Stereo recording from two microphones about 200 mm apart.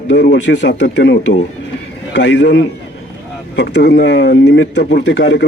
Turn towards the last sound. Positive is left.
turn(degrees=60)  # may be behind; listen again after turning